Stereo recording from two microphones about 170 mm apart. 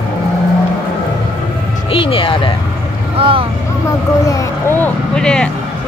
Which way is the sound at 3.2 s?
30° right (ahead or behind).